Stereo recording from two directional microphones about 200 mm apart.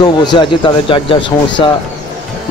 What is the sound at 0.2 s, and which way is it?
Speech, 20° left (ahead or behind).